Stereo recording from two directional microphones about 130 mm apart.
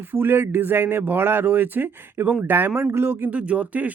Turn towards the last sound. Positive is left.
turn(degrees=-10)  # may be behind; listen again after turning